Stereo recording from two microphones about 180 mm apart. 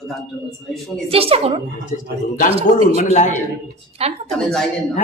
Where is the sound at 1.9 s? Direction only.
45° left (ahead or behind).